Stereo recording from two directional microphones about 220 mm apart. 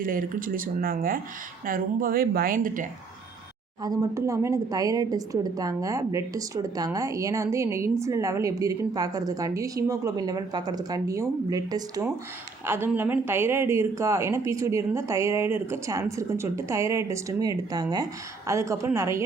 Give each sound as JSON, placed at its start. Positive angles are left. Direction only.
{"t": 0.0, "sound": "speech", "side_deg": -40}
{"t": 3.8, "sound": "a woman's voice", "side_deg": -15}